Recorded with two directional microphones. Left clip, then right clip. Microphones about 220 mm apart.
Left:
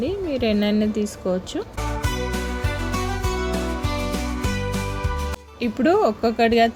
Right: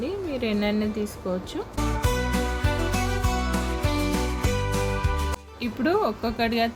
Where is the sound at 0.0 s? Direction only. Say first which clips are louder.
Left 5 dB; 20° left (ahead or behind).